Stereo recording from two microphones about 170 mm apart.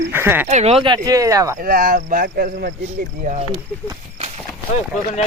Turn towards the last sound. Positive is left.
turn(degrees=40)  # may be behind; listen again after turning